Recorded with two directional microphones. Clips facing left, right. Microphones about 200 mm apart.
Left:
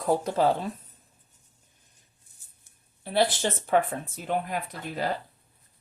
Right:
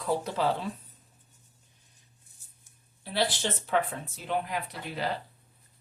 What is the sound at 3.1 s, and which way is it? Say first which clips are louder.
Speech: left 5 dB; 50° left (ahead or behind).